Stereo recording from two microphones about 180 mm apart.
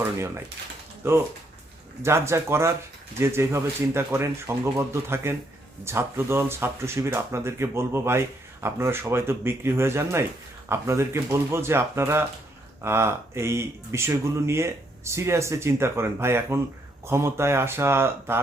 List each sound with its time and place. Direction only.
1.0 s speech: 15° right (ahead or behind)